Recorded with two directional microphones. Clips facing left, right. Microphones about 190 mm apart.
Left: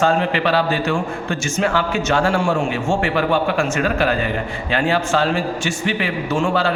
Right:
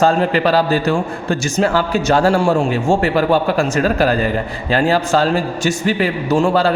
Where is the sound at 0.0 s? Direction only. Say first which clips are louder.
Right 3 dB; 40° right (ahead or behind).